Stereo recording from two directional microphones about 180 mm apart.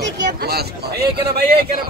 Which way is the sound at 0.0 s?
65° right (ahead or behind).